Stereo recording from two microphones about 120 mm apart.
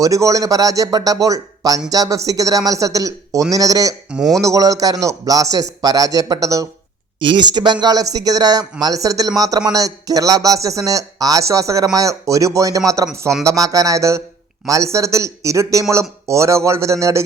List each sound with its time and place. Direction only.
0.0 s a man's voice: 30° right (ahead or behind)
4.1 s speech: 5° right (ahead or behind)
4.4 s speech: 30° right (ahead or behind)
7.2 s a man's voice: 40° right (ahead or behind)